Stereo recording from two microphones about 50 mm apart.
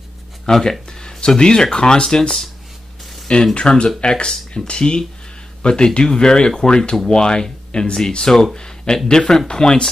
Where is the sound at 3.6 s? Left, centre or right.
Left.